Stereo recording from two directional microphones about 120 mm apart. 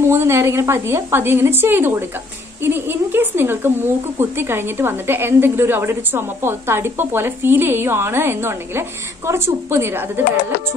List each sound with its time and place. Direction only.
0.1 s speech: 20° right (ahead or behind)